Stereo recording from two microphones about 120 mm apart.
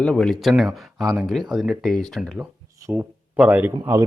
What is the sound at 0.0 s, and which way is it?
Speech, 5° left (ahead or behind).